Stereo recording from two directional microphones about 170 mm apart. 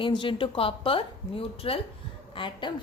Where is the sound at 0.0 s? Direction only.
30° left (ahead or behind).